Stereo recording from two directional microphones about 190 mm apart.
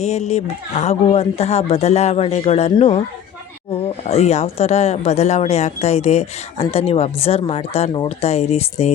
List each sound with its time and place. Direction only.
0.0 s speech: 35° left (ahead or behind)